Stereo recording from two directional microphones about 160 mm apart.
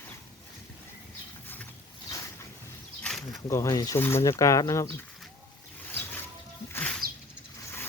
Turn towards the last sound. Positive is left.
turn(degrees=5)  # may be behind; listen again after turning